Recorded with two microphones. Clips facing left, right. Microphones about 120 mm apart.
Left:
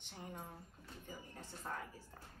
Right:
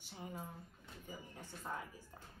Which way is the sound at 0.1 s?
5° right (ahead or behind).